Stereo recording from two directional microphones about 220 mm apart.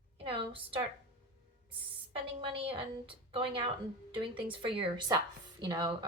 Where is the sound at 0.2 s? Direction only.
25° right (ahead or behind).